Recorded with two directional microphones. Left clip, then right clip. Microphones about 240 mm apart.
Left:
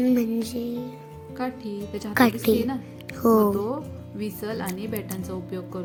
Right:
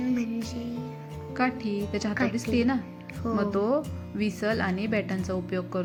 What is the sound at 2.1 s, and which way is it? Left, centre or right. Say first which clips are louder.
Music: left 9 dB; left.